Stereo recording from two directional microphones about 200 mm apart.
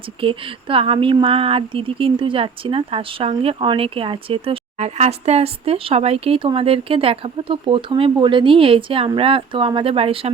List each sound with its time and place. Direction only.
0.2 s speech: 25° right (ahead or behind)